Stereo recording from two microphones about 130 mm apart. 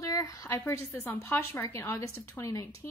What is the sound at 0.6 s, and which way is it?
A woman's voice, 15° left (ahead or behind).